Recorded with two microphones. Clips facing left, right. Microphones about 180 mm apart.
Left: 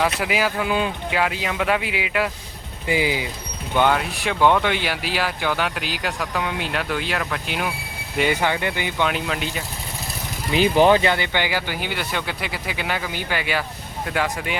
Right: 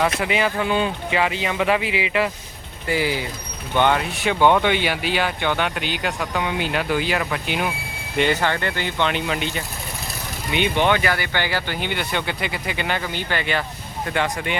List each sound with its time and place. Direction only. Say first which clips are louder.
0.0 s speech: right 1 dB; centre (ahead or behind)
2.8 s speech: even; 15° left (ahead or behind)
3.8 s speech: even; centre (ahead or behind)
10.5 s speech: left 4 dB; 35° left (ahead or behind)
11.1 s speech: left 1 dB; 20° left (ahead or behind); by 14.5 s 5° left (ahead or behind)